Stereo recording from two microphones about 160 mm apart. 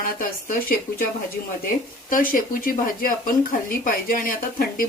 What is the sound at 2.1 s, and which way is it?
Speech, 60° left (ahead or behind).